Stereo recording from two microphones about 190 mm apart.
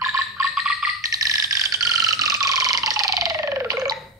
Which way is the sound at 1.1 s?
20° right (ahead or behind).